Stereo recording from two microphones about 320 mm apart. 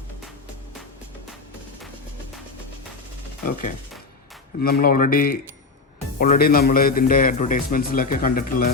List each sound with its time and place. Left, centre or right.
4.6 s a man's voice: left